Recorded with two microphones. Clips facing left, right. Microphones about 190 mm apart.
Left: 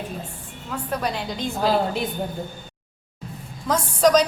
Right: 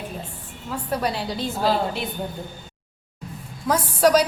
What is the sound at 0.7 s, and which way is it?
Speech, 10° right (ahead or behind).